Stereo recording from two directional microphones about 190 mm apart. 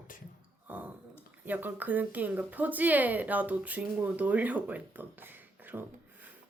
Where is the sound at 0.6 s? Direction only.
10° right (ahead or behind).